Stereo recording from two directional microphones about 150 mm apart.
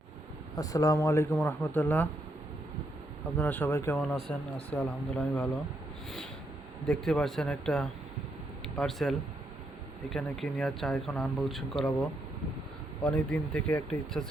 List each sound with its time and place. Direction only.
0.5 s speech: 25° left (ahead or behind)
3.3 s speech: 10° left (ahead or behind)
4.1 s speech: 5° left (ahead or behind)
6.8 s speech: 5° left (ahead or behind)